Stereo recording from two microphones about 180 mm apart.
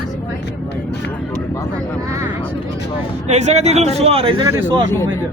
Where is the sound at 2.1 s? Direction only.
15° right (ahead or behind).